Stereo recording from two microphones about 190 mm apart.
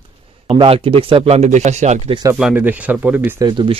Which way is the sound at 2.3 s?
5° right (ahead or behind).